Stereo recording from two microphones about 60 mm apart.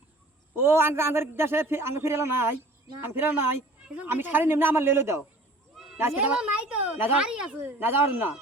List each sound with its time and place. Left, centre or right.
0.5 s a man's voice: right
6.2 s a child's voice: centre
7.6 s a man's voice: right